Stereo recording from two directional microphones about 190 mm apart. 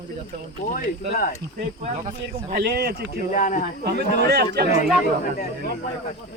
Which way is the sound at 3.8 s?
60° right (ahead or behind).